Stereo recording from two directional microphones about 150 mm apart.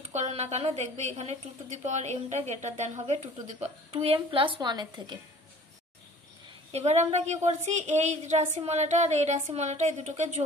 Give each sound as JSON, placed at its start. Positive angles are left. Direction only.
{"t": 0.1, "sound": "a woman's voice", "side_deg": -45}
{"t": 6.7, "sound": "a woman's voice", "side_deg": -45}